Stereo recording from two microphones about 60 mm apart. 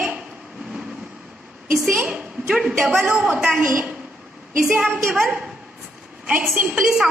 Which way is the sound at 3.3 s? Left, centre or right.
Right.